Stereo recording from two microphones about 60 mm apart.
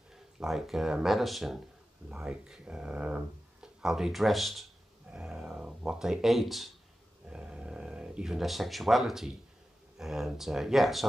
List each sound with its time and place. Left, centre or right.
0.1 s speech: centre
2.0 s speech: centre
3.8 s speech: centre
5.1 s speech: centre
7.2 s a sound: centre
9.9 s speech: centre